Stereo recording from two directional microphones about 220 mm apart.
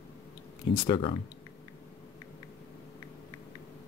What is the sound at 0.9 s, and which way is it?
Speech, 25° left (ahead or behind).